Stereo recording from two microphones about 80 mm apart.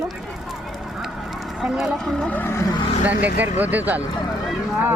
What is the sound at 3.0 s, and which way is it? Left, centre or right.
Speech, right.